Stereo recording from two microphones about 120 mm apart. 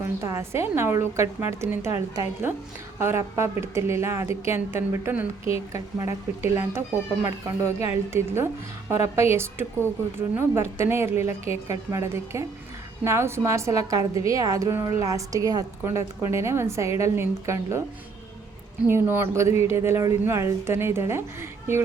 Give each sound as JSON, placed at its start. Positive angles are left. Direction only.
{"t": 0.2, "sound": "a woman's voice", "side_deg": -25}
{"t": 3.0, "sound": "a woman's voice", "side_deg": -20}
{"t": 18.9, "sound": "a woman's voice", "side_deg": -20}